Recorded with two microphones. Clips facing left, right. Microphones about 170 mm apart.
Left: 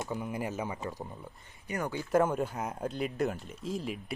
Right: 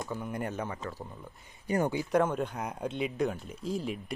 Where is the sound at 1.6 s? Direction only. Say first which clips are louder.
Right 6 dB; 30° right (ahead or behind).